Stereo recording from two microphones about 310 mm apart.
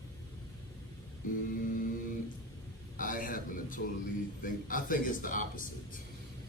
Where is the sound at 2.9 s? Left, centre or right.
Left.